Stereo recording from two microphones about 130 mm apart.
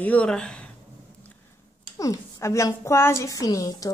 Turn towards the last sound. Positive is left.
turn(degrees=30)  # may be behind; listen again after turning